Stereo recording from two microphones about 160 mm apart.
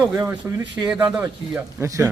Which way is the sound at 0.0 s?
10° right (ahead or behind).